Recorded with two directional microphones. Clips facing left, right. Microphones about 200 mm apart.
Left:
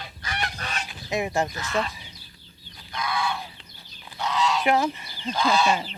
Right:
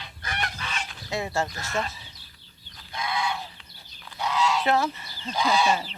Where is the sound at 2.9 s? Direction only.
25° right (ahead or behind).